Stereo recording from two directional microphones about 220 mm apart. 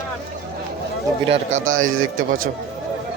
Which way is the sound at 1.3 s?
35° right (ahead or behind).